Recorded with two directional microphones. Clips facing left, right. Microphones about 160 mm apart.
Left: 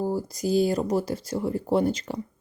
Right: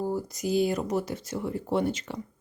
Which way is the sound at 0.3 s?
35° left (ahead or behind).